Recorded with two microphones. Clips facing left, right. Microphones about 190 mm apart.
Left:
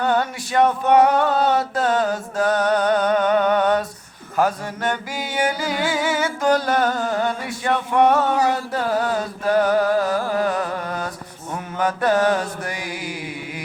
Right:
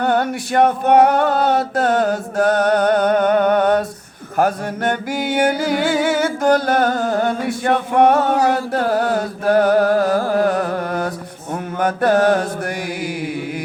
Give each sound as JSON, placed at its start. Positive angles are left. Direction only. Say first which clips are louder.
{"t": 0.0, "sound": "music", "louder": "right 3 dB", "side_deg": -55}
{"t": 10.3, "sound": "carnatic music", "louder": "right 5 dB", "side_deg": -60}
{"t": 11.8, "sound": "music", "louder": "right 3 dB", "side_deg": -55}